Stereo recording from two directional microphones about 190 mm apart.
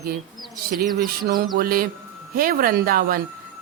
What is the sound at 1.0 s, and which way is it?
Speech, 50° right (ahead or behind).